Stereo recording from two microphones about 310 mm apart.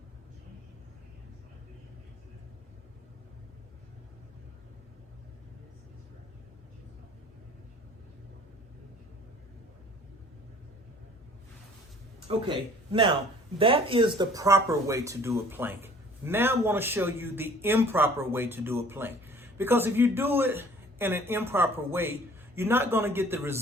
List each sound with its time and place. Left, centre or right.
12.5 s speech: centre